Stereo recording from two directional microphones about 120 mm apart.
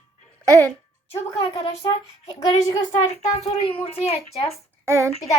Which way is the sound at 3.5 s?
50° left (ahead or behind).